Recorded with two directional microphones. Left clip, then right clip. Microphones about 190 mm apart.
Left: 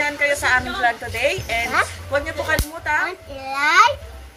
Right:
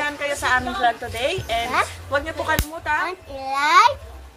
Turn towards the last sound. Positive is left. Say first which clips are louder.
# even
turn(degrees=10)  # may be behind; listen again after turning